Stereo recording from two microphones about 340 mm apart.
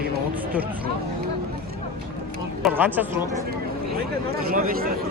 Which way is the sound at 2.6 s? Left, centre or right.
Centre.